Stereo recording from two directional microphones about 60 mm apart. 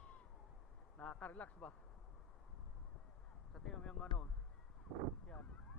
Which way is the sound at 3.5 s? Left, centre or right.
Centre.